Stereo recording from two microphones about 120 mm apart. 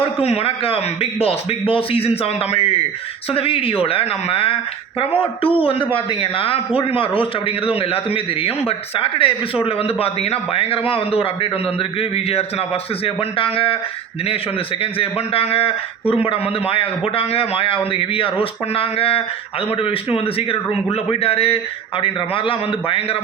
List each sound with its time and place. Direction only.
0.2 s a man's voice: 55° left (ahead or behind)
14.8 s a man's voice: 50° left (ahead or behind)